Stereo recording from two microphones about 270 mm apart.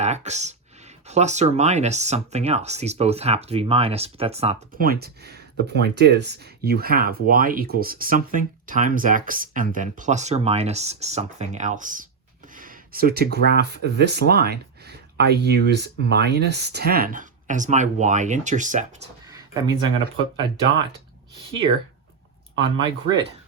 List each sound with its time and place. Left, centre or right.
0.0 s speech: right
12.5 s gasp: right
13.6 s speech: right
19.3 s a sound: centre
22.5 s speech: centre